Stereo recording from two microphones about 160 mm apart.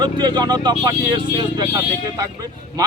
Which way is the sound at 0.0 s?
25° right (ahead or behind).